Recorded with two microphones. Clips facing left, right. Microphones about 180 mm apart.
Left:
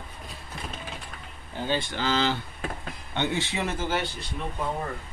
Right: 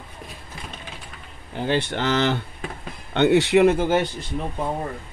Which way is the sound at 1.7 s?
70° right (ahead or behind).